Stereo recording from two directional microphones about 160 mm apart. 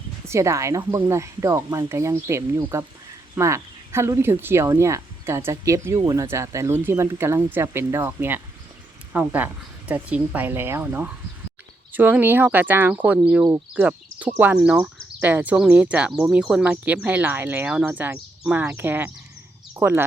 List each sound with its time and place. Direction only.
0.3 s speech: 20° right (ahead or behind)